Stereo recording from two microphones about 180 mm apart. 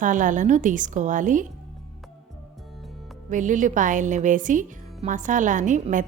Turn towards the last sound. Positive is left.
turn(degrees=-45)  # may be behind; listen again after turning